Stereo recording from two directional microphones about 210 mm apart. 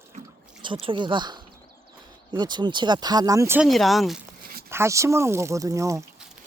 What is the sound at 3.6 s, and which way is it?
Speech, centre (ahead or behind).